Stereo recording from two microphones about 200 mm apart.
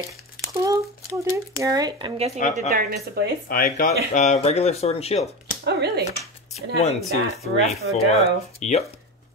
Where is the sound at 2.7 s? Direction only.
50° right (ahead or behind).